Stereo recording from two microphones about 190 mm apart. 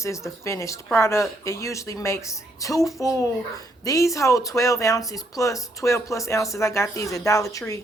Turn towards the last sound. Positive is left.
turn(degrees=15)  # may be behind; listen again after turning